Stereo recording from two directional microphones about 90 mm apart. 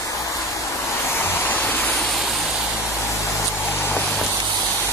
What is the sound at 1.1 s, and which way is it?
Waterfall, 25° left (ahead or behind).